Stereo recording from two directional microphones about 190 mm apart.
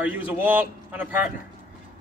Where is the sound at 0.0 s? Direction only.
10° right (ahead or behind).